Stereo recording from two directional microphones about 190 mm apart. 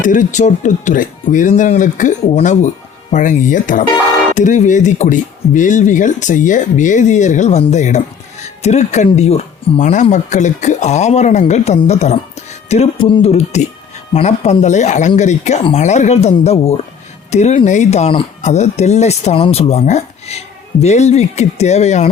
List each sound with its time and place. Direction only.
0.0 s speech: 40° left (ahead or behind)